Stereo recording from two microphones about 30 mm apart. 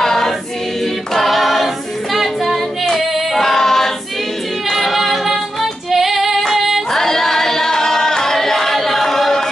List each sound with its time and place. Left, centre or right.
0.0 s choir: centre
1.1 s choir: centre
2.1 s child singing: centre
2.9 s singing: centre
4.6 s female singing: centre
6.9 s singing: centre